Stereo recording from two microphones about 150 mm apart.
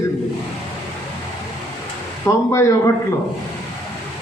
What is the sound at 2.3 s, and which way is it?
Speech, 20° left (ahead or behind).